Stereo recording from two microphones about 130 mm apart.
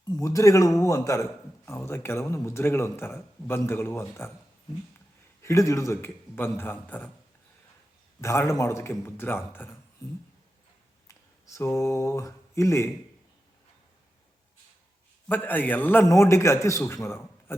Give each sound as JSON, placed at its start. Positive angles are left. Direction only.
{"t": 0.1, "sound": "a man's voice", "side_deg": 25}
{"t": 8.2, "sound": "a man's voice", "side_deg": 20}
{"t": 11.1, "sound": "speech", "side_deg": 25}
{"t": 15.3, "sound": "a man's voice", "side_deg": 15}